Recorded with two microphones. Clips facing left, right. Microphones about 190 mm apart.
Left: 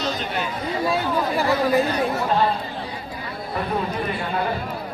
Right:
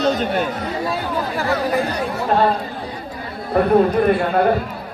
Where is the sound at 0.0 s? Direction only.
55° right (ahead or behind).